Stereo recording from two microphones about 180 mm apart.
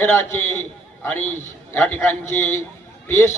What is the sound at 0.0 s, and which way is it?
A man's voice, 10° left (ahead or behind).